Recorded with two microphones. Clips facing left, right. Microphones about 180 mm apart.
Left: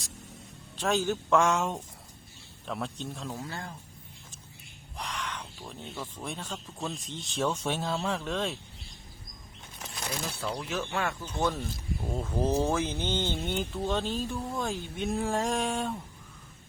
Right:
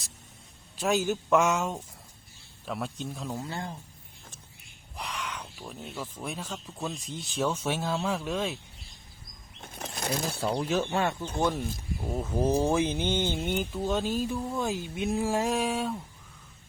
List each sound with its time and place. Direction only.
0.8 s speech: 10° right (ahead or behind)
3.3 s speech: 20° right (ahead or behind)
4.9 s speech: 5° right (ahead or behind)
9.6 s a sound: 50° right (ahead or behind)
10.4 s speech: 30° right (ahead or behind)
11.3 s speech: 10° right (ahead or behind)